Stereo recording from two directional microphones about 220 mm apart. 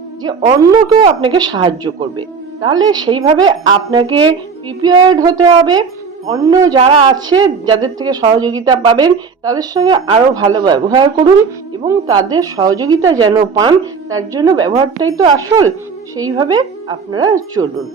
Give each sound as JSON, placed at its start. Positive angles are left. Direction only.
{"t": 0.2, "sound": "a woman's voice", "side_deg": -20}
{"t": 16.1, "sound": "a woman's voice", "side_deg": -15}